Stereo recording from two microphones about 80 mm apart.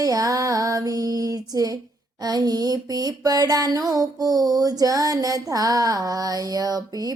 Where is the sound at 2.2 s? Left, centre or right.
Right.